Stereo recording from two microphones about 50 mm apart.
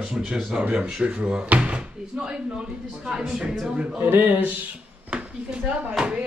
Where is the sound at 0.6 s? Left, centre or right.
Right.